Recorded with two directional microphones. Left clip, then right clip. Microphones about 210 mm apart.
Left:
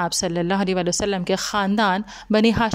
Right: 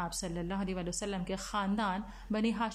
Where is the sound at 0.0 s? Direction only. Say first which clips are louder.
Left 16 dB; 50° left (ahead or behind).